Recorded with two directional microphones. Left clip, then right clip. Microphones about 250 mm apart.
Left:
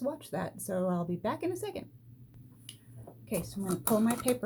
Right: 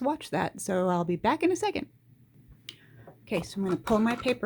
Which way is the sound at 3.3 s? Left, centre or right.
Right.